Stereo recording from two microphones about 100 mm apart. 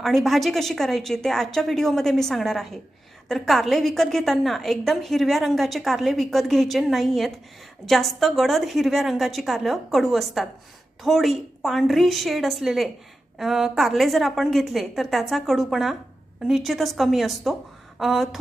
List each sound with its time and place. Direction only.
0.0 s a woman's voice: centre (ahead or behind)